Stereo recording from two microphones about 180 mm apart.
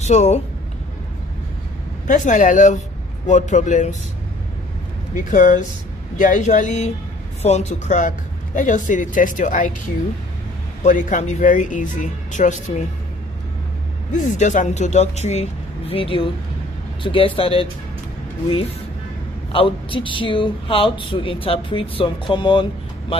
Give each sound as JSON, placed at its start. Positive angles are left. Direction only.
{"t": 0.0, "sound": "speech", "side_deg": 40}
{"t": 2.0, "sound": "speech", "side_deg": 45}
{"t": 5.3, "sound": "speech", "side_deg": 45}
{"t": 10.8, "sound": "speech", "side_deg": 45}
{"t": 14.1, "sound": "speech", "side_deg": 40}
{"t": 19.5, "sound": "speech", "side_deg": 30}